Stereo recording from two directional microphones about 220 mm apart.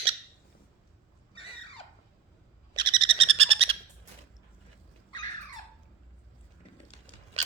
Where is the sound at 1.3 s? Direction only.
25° left (ahead or behind).